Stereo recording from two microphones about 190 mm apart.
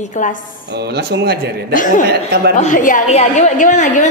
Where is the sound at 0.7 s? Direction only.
60° right (ahead or behind).